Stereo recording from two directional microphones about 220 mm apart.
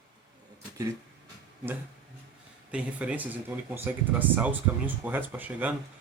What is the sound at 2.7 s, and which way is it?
Speech, 5° right (ahead or behind).